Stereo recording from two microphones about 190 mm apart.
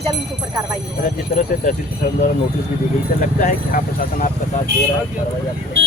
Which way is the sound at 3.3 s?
45° left (ahead or behind).